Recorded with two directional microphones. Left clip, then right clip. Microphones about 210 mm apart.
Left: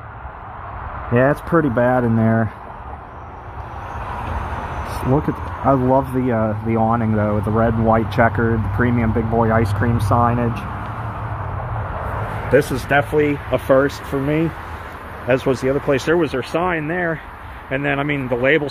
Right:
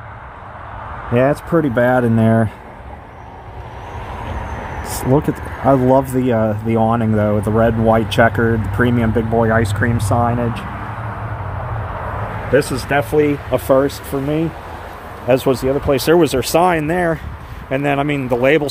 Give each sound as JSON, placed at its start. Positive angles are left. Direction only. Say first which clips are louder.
{"t": 1.1, "sound": "speech", "louder": "right 1 dB", "side_deg": -5}
{"t": 1.6, "sound": "speech", "louder": "right 3 dB", "side_deg": -15}
{"t": 5.7, "sound": "speech", "louder": "right 3 dB", "side_deg": -15}
{"t": 12.5, "sound": "speech", "louder": "even", "side_deg": -10}
{"t": 13.7, "sound": "speech", "louder": "right 1 dB", "side_deg": 0}
{"t": 15.2, "sound": "speech", "louder": "right 3 dB", "side_deg": -10}
{"t": 16.1, "sound": "speech", "louder": "right 5 dB", "side_deg": -25}